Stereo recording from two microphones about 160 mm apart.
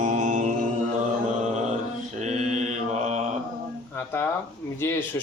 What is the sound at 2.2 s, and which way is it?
Mantra, 45° right (ahead or behind).